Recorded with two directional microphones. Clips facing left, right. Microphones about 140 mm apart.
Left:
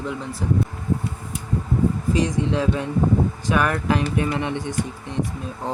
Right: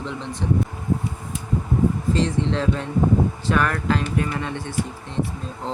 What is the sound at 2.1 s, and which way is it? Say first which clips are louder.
Speech: left 1 dB; 10° left (ahead or behind).